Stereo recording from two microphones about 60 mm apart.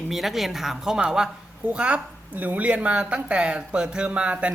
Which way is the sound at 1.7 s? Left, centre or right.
Right.